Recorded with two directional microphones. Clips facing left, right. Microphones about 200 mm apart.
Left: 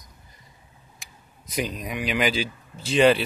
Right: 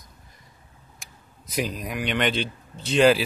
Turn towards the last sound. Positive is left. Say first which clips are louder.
# even
turn(degrees=0)  # may be behind; listen again after turning